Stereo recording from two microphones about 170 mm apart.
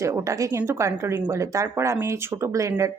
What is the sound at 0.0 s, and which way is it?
Speech, 15° right (ahead or behind).